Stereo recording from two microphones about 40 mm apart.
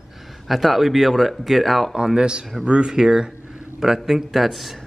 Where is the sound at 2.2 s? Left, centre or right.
Right; by 4.8 s centre.